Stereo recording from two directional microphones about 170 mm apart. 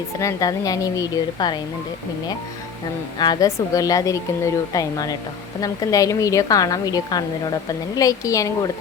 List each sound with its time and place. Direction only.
0.2 s a woman's voice: 20° left (ahead or behind)
3.2 s a woman's voice: 20° left (ahead or behind)